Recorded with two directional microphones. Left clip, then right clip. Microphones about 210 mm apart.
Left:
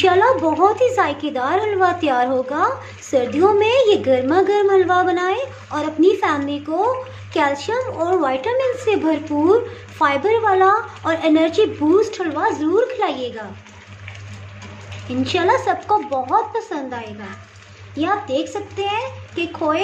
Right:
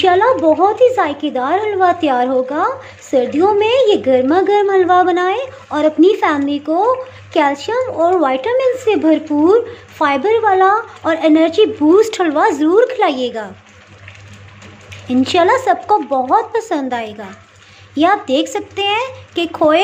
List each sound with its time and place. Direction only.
0.0 s speech: 15° right (ahead or behind)
12.0 s speech: 35° right (ahead or behind)
15.0 s speech: 30° right (ahead or behind)